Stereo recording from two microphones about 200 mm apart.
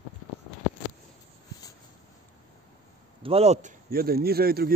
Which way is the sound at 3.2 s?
30° right (ahead or behind).